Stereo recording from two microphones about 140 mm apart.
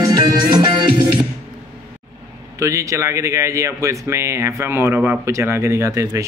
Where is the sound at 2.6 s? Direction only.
20° right (ahead or behind).